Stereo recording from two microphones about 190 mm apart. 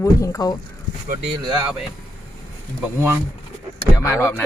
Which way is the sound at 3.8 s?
15° left (ahead or behind).